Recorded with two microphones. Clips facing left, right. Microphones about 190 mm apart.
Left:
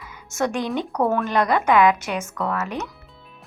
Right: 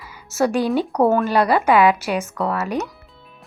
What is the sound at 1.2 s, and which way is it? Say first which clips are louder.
A woman's voice: right 3 dB; 10° right (ahead or behind).